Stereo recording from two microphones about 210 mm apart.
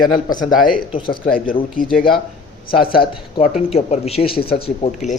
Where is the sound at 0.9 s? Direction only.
25° left (ahead or behind).